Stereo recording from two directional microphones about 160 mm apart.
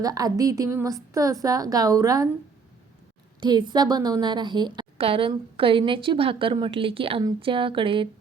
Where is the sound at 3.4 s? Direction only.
25° right (ahead or behind).